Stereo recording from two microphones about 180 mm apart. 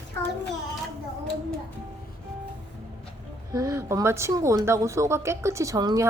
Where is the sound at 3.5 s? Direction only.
20° right (ahead or behind).